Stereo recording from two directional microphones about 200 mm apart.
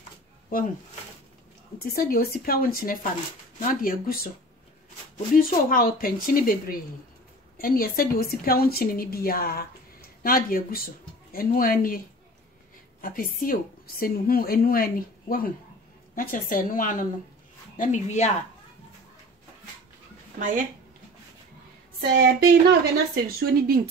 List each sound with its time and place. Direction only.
1.8 s a woman's voice: 45° left (ahead or behind)
5.3 s a woman's voice: 45° left (ahead or behind)
13.0 s a woman's voice: 45° left (ahead or behind)
20.3 s speech: 40° right (ahead or behind)
22.1 s a sound: 55° right (ahead or behind)
23.2 s speech: 50° right (ahead or behind)